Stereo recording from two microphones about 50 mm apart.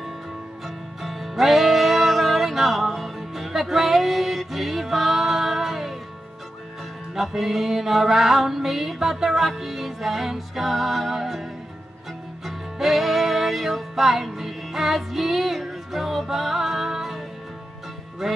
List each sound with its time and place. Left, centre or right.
0.7 s music: centre
7.2 s music: centre
12.4 s music: centre
18.2 s music: centre